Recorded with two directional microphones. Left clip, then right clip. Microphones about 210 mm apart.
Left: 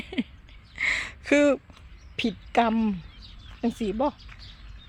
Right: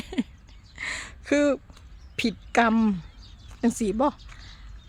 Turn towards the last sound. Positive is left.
turn(degrees=-15)  # may be behind; listen again after turning